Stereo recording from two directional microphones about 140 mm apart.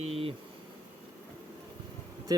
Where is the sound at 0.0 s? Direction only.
45° right (ahead or behind).